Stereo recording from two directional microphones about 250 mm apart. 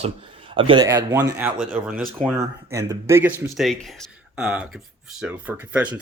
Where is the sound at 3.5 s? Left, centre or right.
Centre.